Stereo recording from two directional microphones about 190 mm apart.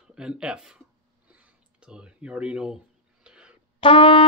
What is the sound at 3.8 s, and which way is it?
Brass instrument, 30° left (ahead or behind).